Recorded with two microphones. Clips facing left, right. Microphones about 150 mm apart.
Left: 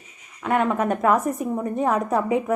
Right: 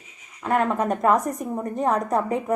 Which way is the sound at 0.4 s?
Centre (ahead or behind).